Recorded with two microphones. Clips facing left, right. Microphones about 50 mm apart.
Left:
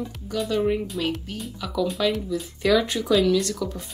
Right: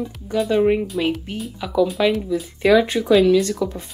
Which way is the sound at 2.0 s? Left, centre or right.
Centre.